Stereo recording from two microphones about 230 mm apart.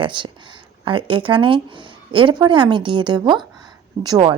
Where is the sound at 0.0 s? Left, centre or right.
Right.